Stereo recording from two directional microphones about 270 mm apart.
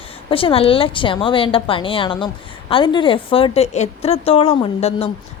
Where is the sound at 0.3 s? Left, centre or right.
Centre.